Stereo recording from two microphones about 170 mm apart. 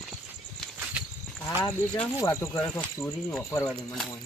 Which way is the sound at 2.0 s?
15° left (ahead or behind).